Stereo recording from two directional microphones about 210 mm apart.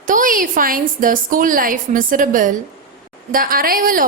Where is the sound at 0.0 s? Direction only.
40° right (ahead or behind).